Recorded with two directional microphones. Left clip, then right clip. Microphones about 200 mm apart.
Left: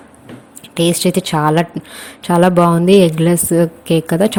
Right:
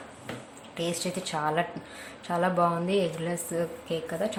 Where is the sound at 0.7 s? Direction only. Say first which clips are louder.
Left 16 dB; 45° left (ahead or behind).